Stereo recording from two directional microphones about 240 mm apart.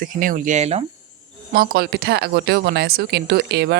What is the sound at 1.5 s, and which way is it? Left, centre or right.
Speech, right.